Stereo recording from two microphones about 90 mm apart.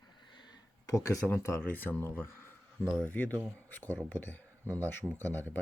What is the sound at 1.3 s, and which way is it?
Speech, 25° left (ahead or behind).